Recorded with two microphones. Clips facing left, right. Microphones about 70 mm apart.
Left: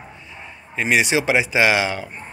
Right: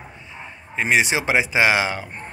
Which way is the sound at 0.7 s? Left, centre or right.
Right.